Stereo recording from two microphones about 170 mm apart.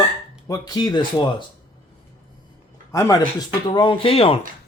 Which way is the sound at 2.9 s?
20° left (ahead or behind).